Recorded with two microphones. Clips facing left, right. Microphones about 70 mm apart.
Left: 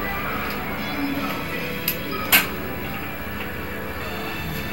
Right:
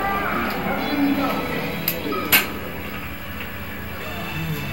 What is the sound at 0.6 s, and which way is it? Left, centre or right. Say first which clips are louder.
Music: right 6 dB; right.